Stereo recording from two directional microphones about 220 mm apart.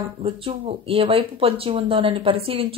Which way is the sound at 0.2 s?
25° right (ahead or behind).